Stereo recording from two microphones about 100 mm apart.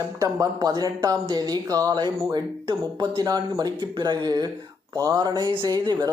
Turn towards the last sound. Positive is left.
turn(degrees=-40)  # may be behind; listen again after turning